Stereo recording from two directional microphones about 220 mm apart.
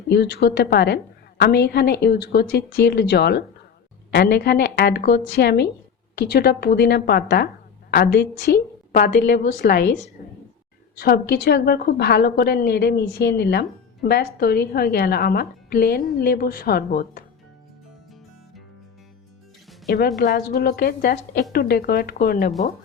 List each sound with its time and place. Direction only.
0.1 s a woman's voice: 45° left (ahead or behind)
20.2 s a woman's voice: 40° left (ahead or behind)